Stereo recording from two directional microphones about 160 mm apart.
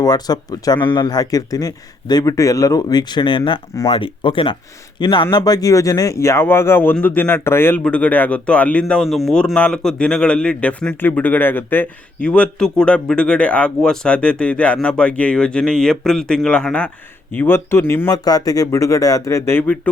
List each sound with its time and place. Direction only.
0.0 s speech: 25° left (ahead or behind); by 19.9 s 10° left (ahead or behind)